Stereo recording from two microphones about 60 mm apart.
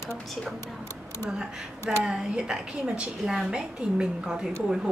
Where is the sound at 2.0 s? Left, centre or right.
Centre.